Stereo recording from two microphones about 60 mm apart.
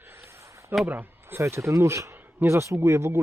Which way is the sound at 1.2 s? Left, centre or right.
Right.